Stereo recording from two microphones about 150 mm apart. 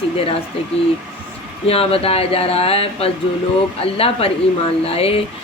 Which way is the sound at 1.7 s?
40° left (ahead or behind).